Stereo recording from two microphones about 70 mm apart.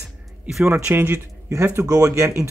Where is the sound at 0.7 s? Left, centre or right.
Right.